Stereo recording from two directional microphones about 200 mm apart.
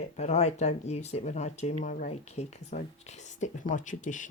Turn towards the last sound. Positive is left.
turn(degrees=40)  # may be behind; listen again after turning